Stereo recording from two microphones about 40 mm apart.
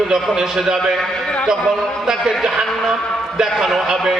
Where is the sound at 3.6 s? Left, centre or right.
Centre.